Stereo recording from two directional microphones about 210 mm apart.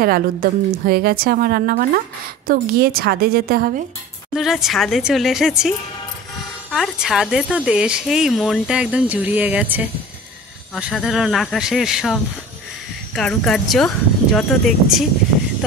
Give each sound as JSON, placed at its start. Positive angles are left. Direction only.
{"t": 0.0, "sound": "a woman's voice", "side_deg": -45}
{"t": 4.3, "sound": "speech", "side_deg": 0}